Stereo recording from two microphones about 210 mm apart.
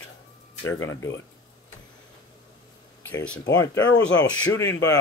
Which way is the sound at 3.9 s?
60° left (ahead or behind).